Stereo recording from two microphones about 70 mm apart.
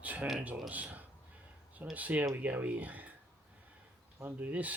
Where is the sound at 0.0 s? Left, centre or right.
Right.